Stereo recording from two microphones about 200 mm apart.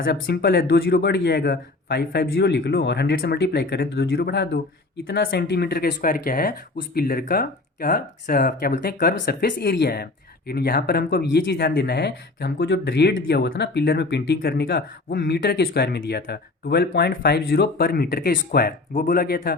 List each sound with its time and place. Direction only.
0.0 s a man's voice: 55° left (ahead or behind)